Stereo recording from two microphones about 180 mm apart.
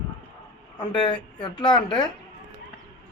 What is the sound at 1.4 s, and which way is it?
Speech, 25° left (ahead or behind).